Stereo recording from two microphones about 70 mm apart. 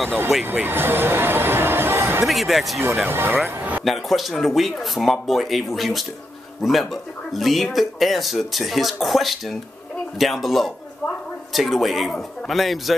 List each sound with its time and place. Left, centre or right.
0.3 s speech: centre
0.7 s a sound: right
2.2 s speech: centre
3.1 s speech: right
3.8 s speech: centre